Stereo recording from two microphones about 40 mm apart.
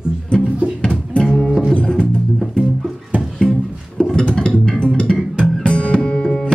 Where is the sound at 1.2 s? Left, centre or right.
Centre.